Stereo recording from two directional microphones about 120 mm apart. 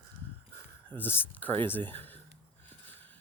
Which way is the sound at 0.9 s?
15° left (ahead or behind).